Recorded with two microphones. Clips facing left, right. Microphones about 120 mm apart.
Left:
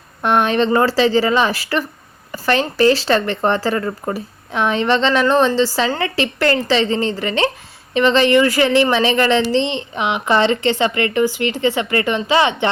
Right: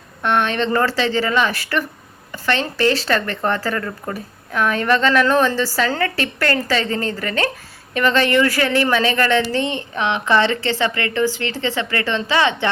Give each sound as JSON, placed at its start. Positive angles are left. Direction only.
{"t": 0.2, "sound": "speech", "side_deg": 35}
{"t": 0.7, "sound": "a woman's voice", "side_deg": 25}
{"t": 0.9, "sound": "a woman's voice", "side_deg": 35}